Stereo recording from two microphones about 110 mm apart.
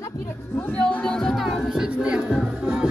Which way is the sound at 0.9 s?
5° left (ahead or behind).